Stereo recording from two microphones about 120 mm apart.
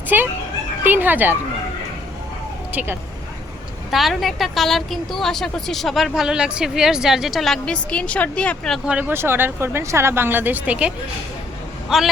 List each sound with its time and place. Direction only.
0.9 s speech: 15° right (ahead or behind)
2.7 s speech: 20° right (ahead or behind)
3.9 s a woman's voice: centre (ahead or behind)
8.9 s a woman's voice: 15° right (ahead or behind)